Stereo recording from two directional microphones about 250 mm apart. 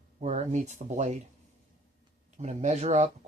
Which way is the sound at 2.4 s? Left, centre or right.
Right.